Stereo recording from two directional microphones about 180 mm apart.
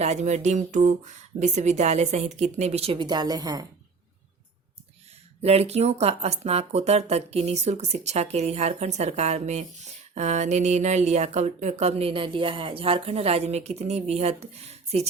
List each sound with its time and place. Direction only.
0.0 s speech: 40° right (ahead or behind); by 3.7 s 20° right (ahead or behind)
5.4 s speech: 35° right (ahead or behind)